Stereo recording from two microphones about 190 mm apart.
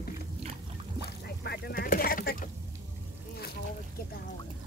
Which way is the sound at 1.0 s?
60° left (ahead or behind).